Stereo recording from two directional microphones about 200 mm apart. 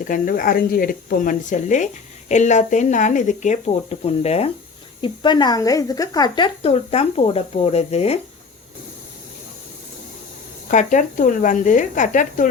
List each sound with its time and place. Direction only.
0.1 s speech: 45° left (ahead or behind)
10.7 s speech: 40° left (ahead or behind)